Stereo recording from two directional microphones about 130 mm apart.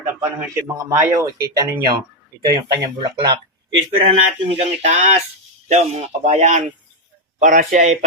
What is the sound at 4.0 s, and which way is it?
Speech, 55° right (ahead or behind).